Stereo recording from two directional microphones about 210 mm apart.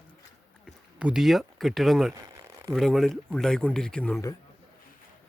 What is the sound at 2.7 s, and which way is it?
Speech, centre (ahead or behind).